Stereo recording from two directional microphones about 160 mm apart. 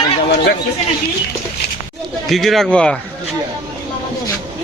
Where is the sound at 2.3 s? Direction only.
Centre (ahead or behind).